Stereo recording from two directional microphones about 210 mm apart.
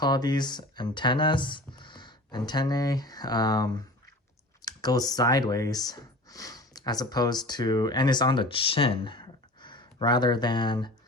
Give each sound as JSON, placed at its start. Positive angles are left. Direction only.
{"t": 0.0, "sound": "speech", "side_deg": 20}